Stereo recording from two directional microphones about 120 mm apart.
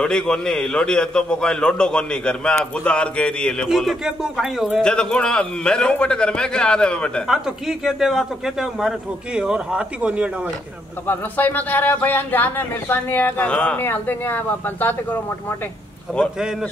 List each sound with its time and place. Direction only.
0.0 s a man's voice: 5° left (ahead or behind)
7.2 s speech: 5° right (ahead or behind)
11.1 s a man's voice: 15° left (ahead or behind)
16.1 s speech: 5° right (ahead or behind)